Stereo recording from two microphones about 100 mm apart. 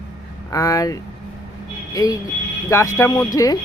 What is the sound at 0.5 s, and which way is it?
Speech, 35° left (ahead or behind).